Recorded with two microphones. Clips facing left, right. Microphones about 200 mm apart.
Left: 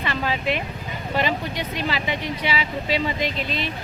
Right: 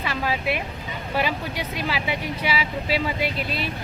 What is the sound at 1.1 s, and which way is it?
Speech, 10° right (ahead or behind).